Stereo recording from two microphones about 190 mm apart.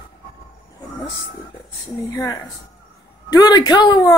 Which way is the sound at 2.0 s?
20° left (ahead or behind).